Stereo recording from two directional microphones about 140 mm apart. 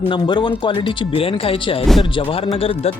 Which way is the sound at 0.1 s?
35° left (ahead or behind).